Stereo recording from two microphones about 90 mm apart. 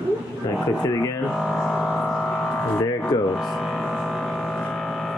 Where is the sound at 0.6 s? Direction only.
35° left (ahead or behind).